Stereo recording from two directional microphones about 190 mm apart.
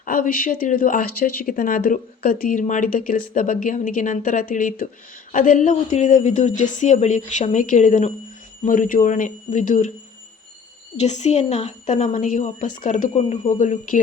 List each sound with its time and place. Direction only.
0.0 s a woman's voice: 45° left (ahead or behind)
10.9 s a woman's voice: 35° left (ahead or behind)